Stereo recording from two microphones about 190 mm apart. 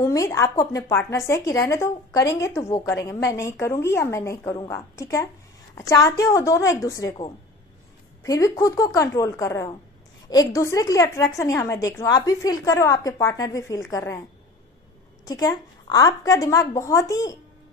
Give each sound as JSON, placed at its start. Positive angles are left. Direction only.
{"t": 0.0, "sound": "a woman's voice", "side_deg": 15}
{"t": 15.2, "sound": "a woman's voice", "side_deg": 20}